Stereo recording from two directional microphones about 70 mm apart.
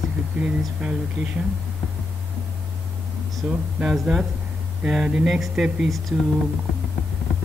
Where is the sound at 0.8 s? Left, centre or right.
Centre.